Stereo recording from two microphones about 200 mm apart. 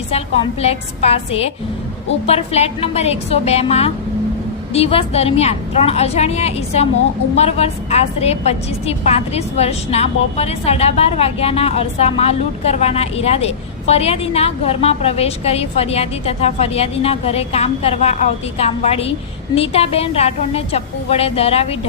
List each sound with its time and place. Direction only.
0.6 s a woman's voice: 30° left (ahead or behind)